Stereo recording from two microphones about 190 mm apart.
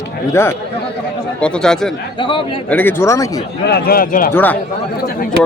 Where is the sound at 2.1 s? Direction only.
25° left (ahead or behind).